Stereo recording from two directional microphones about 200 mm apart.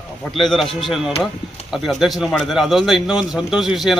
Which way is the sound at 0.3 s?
Centre (ahead or behind).